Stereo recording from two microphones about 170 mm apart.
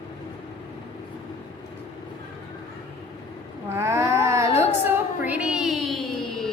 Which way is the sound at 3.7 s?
15° right (ahead or behind).